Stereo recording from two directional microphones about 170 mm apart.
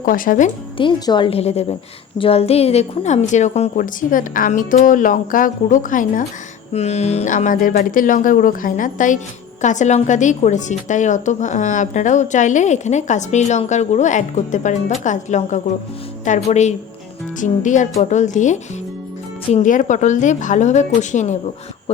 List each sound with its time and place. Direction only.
0.0 s a woman's voice: 55° left (ahead or behind)
0.8 s a woman's voice: 25° left (ahead or behind); by 6.2 s 50° left (ahead or behind)
6.7 s a woman's voice: 40° left (ahead or behind)
19.6 s a woman's voice: 50° left (ahead or behind)